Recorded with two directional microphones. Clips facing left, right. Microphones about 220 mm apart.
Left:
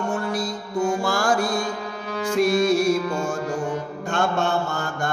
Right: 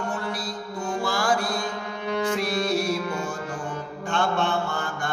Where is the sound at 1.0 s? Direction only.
45° left (ahead or behind).